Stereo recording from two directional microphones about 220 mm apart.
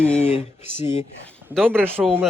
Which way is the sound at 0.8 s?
30° left (ahead or behind).